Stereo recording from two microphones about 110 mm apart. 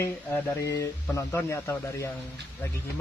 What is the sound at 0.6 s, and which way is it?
Speech, 30° left (ahead or behind).